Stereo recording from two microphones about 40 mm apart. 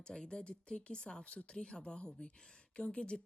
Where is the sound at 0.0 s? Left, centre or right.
Left.